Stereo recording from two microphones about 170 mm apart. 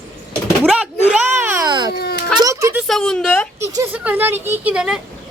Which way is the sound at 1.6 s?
25° right (ahead or behind).